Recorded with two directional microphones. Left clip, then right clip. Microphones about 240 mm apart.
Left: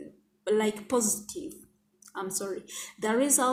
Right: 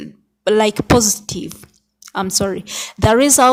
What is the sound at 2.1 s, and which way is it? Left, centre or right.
A woman's voice, right.